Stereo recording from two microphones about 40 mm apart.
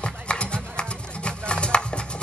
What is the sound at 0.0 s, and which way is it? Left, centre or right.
Music, left.